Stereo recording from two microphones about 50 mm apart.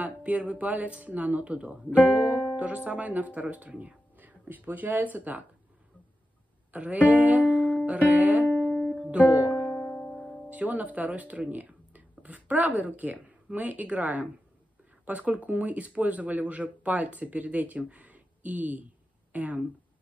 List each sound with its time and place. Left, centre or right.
0.0 s speech: right
6.7 s speech: right
8.1 s music: right
9.7 s music: centre
10.5 s speech: right